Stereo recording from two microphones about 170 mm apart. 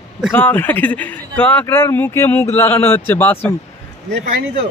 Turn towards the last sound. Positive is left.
turn(degrees=-80)